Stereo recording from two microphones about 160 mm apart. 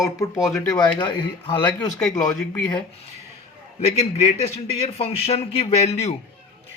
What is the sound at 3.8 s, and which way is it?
A man's voice, 40° left (ahead or behind).